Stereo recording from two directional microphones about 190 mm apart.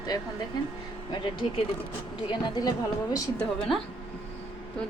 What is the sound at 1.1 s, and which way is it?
A woman's voice, 25° left (ahead or behind).